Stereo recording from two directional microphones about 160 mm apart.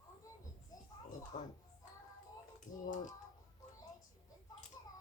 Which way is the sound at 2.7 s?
55° left (ahead or behind).